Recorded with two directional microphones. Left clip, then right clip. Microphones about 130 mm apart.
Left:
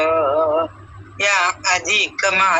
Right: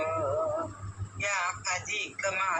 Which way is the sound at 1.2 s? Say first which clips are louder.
Left 14 dB; 90° left.